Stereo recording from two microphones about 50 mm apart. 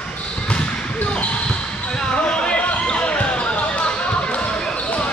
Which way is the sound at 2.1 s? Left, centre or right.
Left.